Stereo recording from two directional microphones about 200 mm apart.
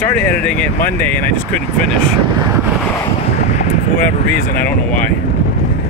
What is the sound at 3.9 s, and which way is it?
Speech, 45° left (ahead or behind).